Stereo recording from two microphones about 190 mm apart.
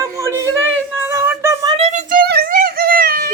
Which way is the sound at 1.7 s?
35° right (ahead or behind).